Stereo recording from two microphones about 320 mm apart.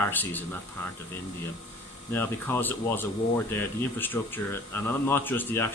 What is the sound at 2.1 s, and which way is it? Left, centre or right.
Speech, centre.